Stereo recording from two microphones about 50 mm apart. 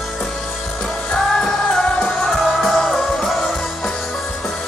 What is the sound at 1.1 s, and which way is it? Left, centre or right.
Music, centre.